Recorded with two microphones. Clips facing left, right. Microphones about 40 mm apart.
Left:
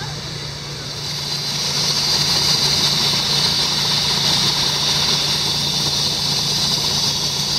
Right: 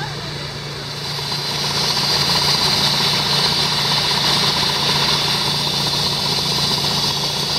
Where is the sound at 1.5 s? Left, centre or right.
Centre.